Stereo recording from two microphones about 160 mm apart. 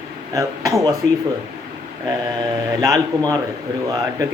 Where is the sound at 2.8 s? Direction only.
20° right (ahead or behind).